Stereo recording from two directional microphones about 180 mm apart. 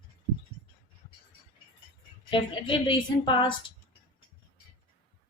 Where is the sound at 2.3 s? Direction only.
30° left (ahead or behind).